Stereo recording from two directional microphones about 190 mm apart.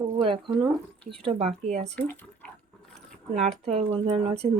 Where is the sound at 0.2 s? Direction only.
25° right (ahead or behind).